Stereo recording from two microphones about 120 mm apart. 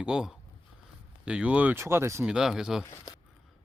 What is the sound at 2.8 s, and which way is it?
Speech, 25° left (ahead or behind).